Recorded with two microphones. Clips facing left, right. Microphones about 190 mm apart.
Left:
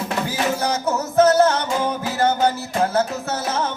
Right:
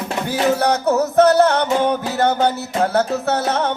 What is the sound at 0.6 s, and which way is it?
Music, 65° right (ahead or behind).